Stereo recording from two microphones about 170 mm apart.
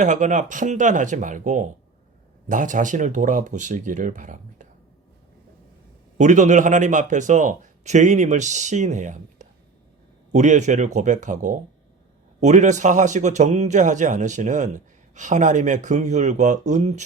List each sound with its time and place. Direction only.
0.0 s a man's voice: 45° right (ahead or behind)
6.1 s a man's voice: 45° right (ahead or behind)